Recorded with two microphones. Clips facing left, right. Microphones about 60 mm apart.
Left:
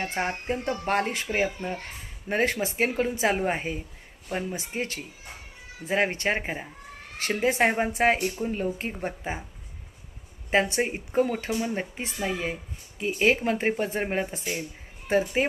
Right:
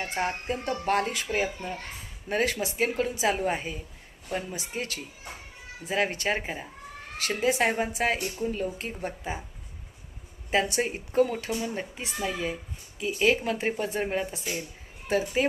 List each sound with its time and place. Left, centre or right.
0.2 s speech: left
10.5 s speech: left